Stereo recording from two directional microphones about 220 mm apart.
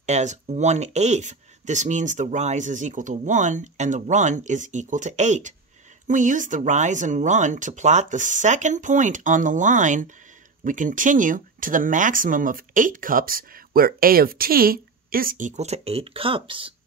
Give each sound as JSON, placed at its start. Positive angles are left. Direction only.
{"t": 0.0, "sound": "speech", "side_deg": -30}